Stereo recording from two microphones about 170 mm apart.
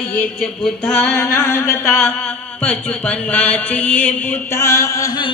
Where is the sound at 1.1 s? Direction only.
15° left (ahead or behind).